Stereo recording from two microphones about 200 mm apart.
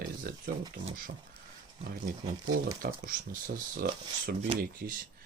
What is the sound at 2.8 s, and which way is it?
Speech, 45° right (ahead or behind).